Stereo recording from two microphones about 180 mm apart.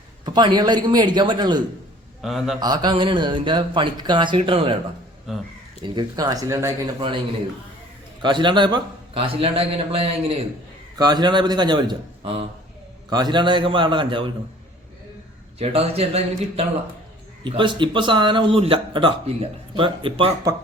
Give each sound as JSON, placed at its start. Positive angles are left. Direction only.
{"t": 0.3, "sound": "speech", "side_deg": -25}
{"t": 2.2, "sound": "a man's voice", "side_deg": 0}
{"t": 2.6, "sound": "speech", "side_deg": -20}
{"t": 5.3, "sound": "a man's voice", "side_deg": 0}
{"t": 5.8, "sound": "speech", "side_deg": -25}
{"t": 8.2, "sound": "a man's voice", "side_deg": -25}
{"t": 15.5, "sound": "a man's voice", "side_deg": -35}